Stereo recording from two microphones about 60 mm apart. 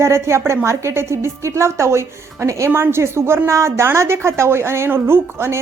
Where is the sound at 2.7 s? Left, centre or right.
Right.